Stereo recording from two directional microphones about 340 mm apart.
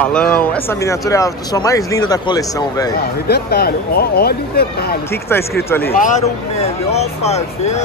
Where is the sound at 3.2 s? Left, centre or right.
Left.